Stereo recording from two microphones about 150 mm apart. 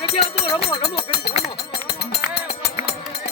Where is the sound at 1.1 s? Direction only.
90° left.